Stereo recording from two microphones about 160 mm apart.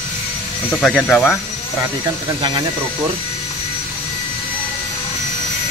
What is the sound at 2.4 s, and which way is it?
Speech, 25° right (ahead or behind).